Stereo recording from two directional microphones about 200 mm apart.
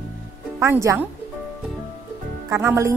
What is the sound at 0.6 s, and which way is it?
Speech, 15° right (ahead or behind).